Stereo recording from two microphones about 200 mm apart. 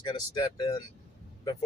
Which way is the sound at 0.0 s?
20° left (ahead or behind).